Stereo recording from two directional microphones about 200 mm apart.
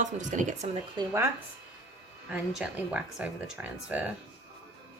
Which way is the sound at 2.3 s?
5° right (ahead or behind).